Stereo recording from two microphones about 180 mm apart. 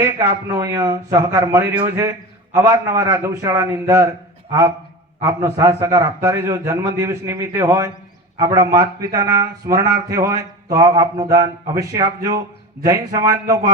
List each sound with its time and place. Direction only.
0.0 s a man's voice: 15° right (ahead or behind)
5.2 s a man's voice: 15° right (ahead or behind)